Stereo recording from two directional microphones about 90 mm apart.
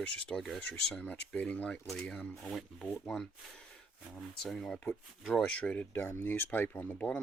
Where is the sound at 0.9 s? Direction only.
15° left (ahead or behind).